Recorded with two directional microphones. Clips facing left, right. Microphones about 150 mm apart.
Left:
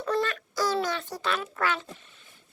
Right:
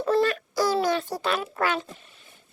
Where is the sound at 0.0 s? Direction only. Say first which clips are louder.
Right 5 dB; 30° right (ahead or behind).